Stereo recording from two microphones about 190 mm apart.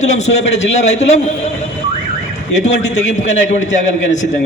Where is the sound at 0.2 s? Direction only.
35° left (ahead or behind).